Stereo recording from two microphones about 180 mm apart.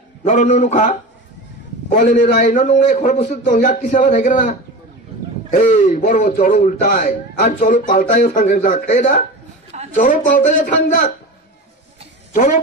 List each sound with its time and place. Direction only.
0.2 s a man's voice: 40° left (ahead or behind)
12.3 s speech: 45° left (ahead or behind)